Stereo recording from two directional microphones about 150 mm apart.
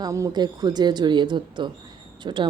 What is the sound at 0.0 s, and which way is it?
Speech, 25° right (ahead or behind).